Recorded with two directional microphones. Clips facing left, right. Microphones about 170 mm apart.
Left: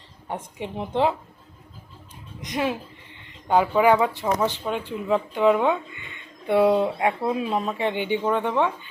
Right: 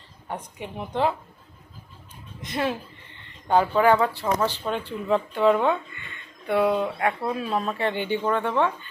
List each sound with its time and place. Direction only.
0.3 s a woman's voice: 25° left (ahead or behind)
2.4 s speech: 15° left (ahead or behind)